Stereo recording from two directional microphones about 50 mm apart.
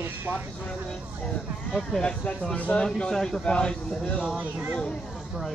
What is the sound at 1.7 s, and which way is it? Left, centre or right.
A man's voice, centre.